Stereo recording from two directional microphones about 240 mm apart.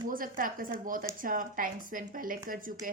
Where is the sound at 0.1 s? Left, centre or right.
Right.